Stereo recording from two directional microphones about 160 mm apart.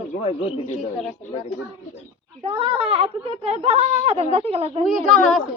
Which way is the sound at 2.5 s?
35° right (ahead or behind).